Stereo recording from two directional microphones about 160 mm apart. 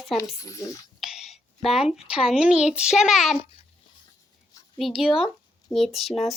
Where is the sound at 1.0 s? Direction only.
Centre (ahead or behind).